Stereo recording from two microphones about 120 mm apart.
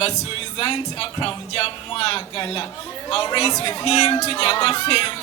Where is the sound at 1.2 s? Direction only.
50° left (ahead or behind).